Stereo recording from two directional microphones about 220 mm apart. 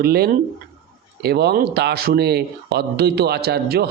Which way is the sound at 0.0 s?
45° right (ahead or behind).